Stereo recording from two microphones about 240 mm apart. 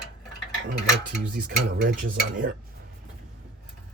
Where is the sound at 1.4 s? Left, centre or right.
Right.